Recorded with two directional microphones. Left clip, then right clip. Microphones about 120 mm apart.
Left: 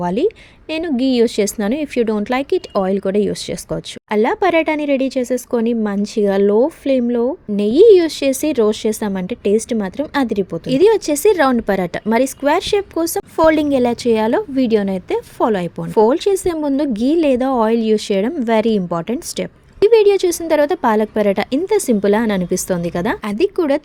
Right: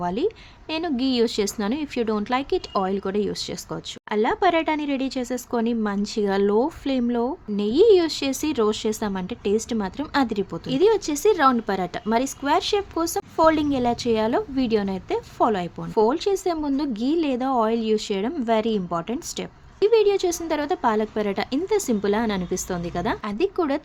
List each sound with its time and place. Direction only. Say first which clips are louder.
0.0 s a woman's voice: left 7 dB; 40° left (ahead or behind); by 7.3 s 25° left (ahead or behind)
7.5 s a woman's voice: left 8 dB; 40° left (ahead or behind)
10.7 s a woman's voice: left 7 dB; 45° left (ahead or behind)